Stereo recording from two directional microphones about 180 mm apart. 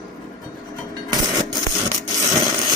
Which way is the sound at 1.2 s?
20° right (ahead or behind).